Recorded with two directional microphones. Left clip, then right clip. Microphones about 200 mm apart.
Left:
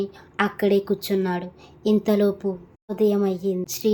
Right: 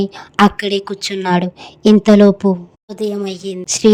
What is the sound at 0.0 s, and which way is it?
A woman's voice, 50° right (ahead or behind).